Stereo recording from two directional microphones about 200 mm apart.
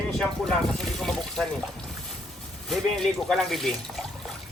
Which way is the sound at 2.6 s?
Centre (ahead or behind).